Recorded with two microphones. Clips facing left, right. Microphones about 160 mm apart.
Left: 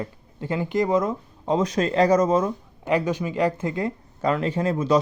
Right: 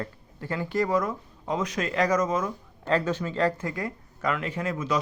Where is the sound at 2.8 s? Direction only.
15° left (ahead or behind).